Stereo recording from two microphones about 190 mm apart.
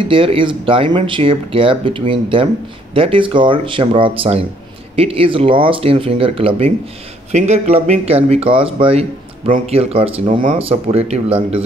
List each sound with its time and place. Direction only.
0.0 s speech: 30° right (ahead or behind)